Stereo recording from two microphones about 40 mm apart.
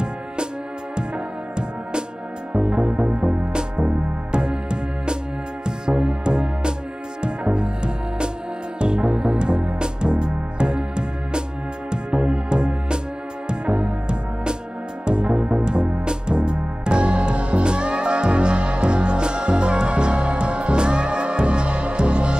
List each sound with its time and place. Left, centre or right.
2.5 s music: right